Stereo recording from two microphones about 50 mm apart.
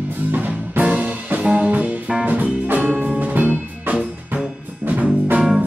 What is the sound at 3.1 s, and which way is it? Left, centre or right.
Music, right.